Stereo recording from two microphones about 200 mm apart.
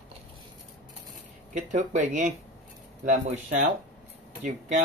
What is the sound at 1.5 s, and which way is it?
Speech, 35° right (ahead or behind).